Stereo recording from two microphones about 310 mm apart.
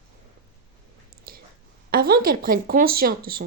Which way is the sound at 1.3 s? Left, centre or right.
Right.